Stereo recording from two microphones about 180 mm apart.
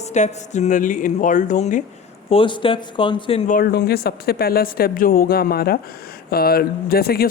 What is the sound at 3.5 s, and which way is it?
Speech, 55° left (ahead or behind).